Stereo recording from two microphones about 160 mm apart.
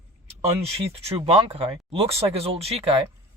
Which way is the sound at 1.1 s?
35° right (ahead or behind).